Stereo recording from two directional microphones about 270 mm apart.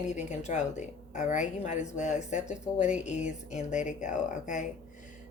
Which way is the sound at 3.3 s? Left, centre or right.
Left.